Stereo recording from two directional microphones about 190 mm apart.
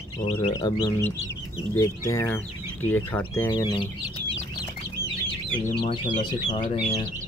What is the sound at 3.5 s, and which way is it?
Speech, 25° left (ahead or behind).